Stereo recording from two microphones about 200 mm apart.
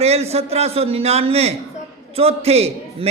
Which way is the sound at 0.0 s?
30° right (ahead or behind).